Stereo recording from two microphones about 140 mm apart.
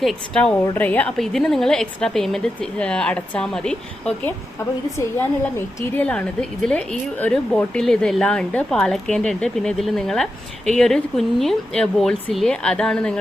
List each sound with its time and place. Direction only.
0.0 s a woman's voice: 5° left (ahead or behind)